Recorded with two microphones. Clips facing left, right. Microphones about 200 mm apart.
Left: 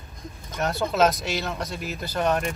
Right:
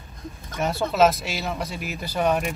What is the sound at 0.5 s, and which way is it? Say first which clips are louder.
Speech: right 2 dB; 5° right (ahead or behind).